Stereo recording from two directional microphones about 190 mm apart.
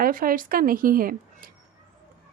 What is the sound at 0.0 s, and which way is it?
Speech, 45° right (ahead or behind).